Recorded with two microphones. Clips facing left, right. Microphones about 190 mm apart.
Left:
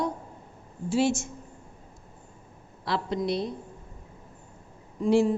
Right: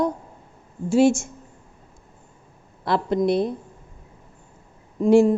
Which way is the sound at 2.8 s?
50° right (ahead or behind).